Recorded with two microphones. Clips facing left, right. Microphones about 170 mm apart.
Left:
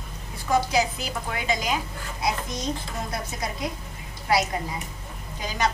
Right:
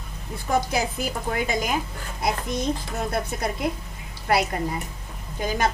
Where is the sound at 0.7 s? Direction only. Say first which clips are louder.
Left 1 dB; 50° right (ahead or behind).